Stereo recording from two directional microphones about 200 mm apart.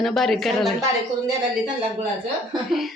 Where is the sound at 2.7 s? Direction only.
Centre (ahead or behind).